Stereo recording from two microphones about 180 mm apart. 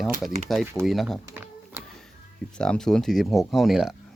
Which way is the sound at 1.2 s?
10° right (ahead or behind).